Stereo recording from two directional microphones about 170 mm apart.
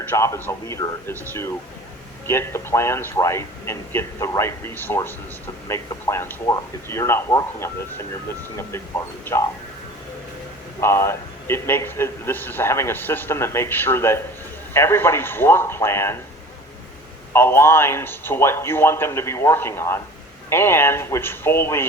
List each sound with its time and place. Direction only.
0.1 s a man's voice: 15° left (ahead or behind)
10.8 s a man's voice: 15° left (ahead or behind)
17.3 s a man's voice: 15° left (ahead or behind)